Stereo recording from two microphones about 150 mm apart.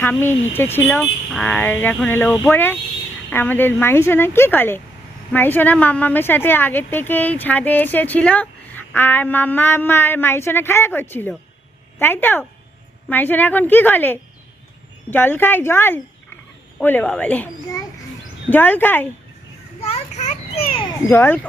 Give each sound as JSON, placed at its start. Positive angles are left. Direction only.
{"t": 0.0, "sound": "a woman's voice", "side_deg": 15}
{"t": 19.8, "sound": "a child's voice", "side_deg": 50}
{"t": 21.1, "sound": "a woman's voice", "side_deg": 15}